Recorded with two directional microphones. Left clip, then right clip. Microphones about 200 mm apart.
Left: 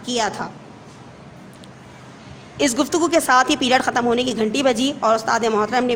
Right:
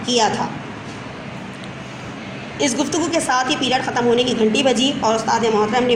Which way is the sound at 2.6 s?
50° left (ahead or behind).